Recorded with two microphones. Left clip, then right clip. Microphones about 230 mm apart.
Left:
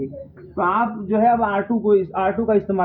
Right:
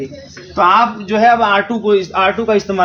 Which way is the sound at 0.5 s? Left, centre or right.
Right.